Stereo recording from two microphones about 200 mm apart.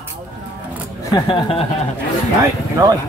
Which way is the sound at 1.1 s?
25° left (ahead or behind).